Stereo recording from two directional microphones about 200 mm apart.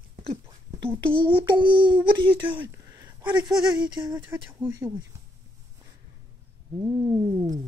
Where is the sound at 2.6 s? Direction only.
10° right (ahead or behind).